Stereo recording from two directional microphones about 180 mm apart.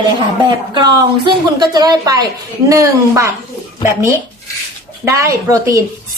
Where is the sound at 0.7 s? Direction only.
25° right (ahead or behind).